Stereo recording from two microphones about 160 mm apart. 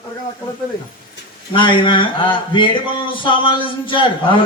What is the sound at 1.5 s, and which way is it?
A man's voice, 30° left (ahead or behind).